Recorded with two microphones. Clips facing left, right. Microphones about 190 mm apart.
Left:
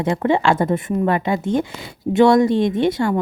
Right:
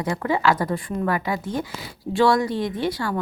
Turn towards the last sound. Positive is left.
turn(degrees=25)  # may be behind; listen again after turning